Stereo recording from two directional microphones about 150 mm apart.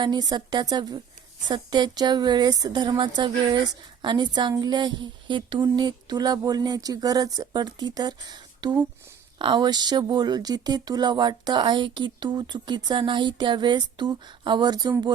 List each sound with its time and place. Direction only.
0.0 s speech: 25° right (ahead or behind)